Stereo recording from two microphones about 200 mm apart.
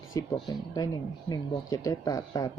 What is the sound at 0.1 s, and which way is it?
Speech, 20° left (ahead or behind).